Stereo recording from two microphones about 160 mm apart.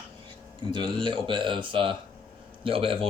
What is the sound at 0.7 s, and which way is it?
Speech, 30° right (ahead or behind).